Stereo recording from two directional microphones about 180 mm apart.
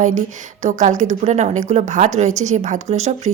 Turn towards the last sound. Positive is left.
turn(degrees=-40)  # may be behind; listen again after turning